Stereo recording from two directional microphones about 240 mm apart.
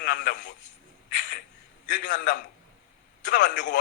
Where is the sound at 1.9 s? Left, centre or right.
Left.